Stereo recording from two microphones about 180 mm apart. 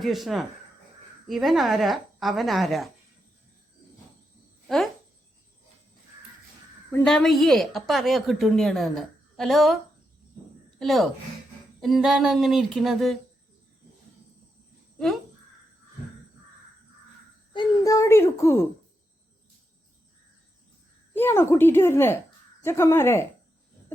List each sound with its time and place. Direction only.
0.0 s a woman's voice: centre (ahead or behind)
7.0 s a woman's voice: 5° left (ahead or behind)
10.8 s a woman's voice: centre (ahead or behind)
14.9 s speech: centre (ahead or behind)
17.5 s a child's voice: 20° left (ahead or behind)
21.1 s a child's voice: 10° left (ahead or behind)